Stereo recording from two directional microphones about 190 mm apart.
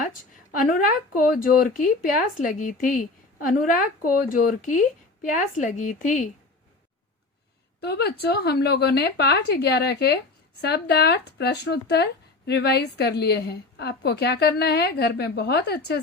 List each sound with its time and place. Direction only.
0.6 s speech: 45° left (ahead or behind)
7.8 s a woman's voice: 60° left (ahead or behind)